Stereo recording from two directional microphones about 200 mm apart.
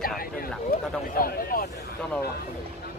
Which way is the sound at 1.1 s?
45° left (ahead or behind).